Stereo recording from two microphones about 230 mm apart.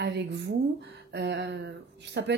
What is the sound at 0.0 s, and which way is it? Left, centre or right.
Speech, right.